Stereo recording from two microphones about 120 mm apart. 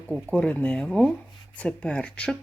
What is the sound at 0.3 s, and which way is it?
Speech, 10° left (ahead or behind).